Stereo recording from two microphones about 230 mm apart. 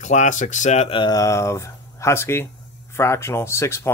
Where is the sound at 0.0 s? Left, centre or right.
Left.